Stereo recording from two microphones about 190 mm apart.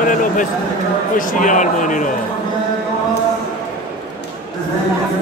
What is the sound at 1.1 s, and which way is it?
Speech, 45° left (ahead or behind).